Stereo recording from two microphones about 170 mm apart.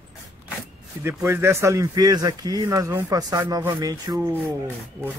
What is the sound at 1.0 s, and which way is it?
Speech, 15° right (ahead or behind).